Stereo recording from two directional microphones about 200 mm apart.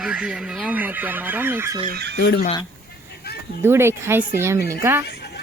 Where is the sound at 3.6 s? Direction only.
10° right (ahead or behind).